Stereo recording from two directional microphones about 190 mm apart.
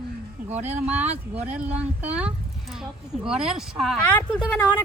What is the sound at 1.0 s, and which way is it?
Speech, 35° right (ahead or behind).